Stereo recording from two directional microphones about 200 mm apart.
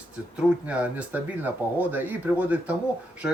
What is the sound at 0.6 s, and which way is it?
Speech, 5° right (ahead or behind).